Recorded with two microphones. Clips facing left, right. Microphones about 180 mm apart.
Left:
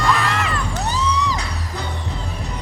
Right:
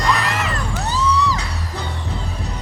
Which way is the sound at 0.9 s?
15° left (ahead or behind).